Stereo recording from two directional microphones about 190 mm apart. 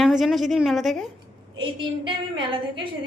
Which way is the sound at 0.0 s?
Centre (ahead or behind).